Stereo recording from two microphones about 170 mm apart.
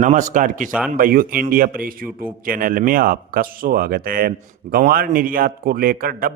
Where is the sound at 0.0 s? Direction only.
50° right (ahead or behind).